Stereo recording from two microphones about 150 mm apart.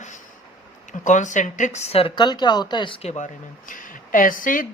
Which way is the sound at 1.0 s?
55° left (ahead or behind).